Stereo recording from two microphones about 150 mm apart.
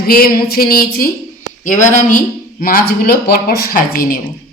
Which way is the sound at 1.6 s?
55° left (ahead or behind).